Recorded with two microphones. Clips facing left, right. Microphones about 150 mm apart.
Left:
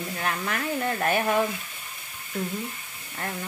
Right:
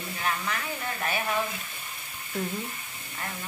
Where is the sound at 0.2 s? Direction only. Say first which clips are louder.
Left 1 dB; 55° left (ahead or behind).